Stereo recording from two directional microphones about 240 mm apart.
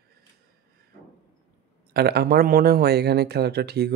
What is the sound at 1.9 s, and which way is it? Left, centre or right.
Speech, right.